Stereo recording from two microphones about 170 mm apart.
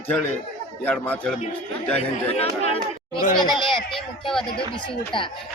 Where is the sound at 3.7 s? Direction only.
Centre (ahead or behind).